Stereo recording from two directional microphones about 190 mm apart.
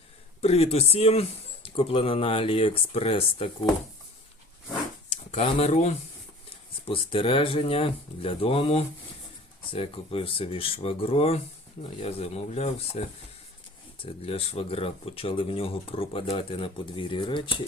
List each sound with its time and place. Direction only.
0.4 s speech: 35° left (ahead or behind)
5.0 s speech: 35° left (ahead or behind)